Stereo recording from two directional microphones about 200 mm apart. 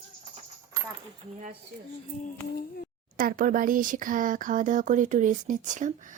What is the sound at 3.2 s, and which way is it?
Speech, 45° right (ahead or behind).